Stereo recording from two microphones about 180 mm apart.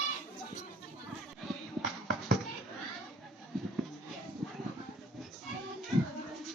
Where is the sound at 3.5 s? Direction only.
Centre (ahead or behind).